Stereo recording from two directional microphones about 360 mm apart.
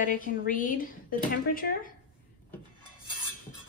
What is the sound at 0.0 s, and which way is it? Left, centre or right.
A woman's voice, left.